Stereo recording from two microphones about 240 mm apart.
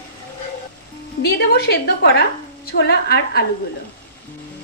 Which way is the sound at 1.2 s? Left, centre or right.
Left.